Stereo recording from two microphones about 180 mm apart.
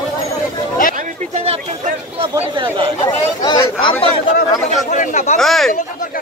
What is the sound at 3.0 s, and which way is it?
Speech, 20° left (ahead or behind).